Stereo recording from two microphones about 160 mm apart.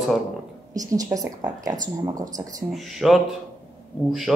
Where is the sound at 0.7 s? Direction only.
20° right (ahead or behind).